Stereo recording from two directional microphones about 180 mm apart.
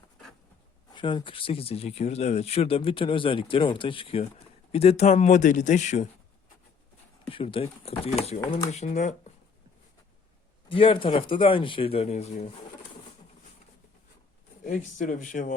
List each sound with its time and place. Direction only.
0.9 s a man's voice: 25° left (ahead or behind); by 6.1 s 40° left (ahead or behind)
7.3 s a man's voice: 30° left (ahead or behind)
10.7 s speech: 30° left (ahead or behind)
14.6 s speech: 45° left (ahead or behind)